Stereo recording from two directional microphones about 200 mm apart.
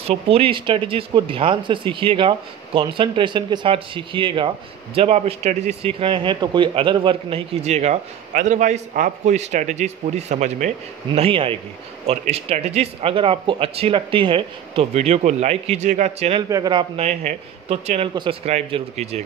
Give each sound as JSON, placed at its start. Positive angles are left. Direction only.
{"t": 0.0, "sound": "speech", "side_deg": -30}
{"t": 16.4, "sound": "speech", "side_deg": -20}